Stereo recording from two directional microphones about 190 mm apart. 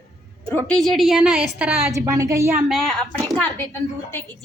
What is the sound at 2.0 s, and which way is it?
Speech, 15° right (ahead or behind).